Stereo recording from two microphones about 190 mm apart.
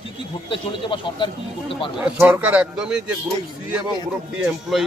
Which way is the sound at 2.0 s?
10° right (ahead or behind).